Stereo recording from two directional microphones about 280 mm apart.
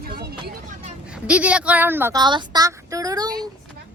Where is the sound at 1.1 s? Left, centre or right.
Centre.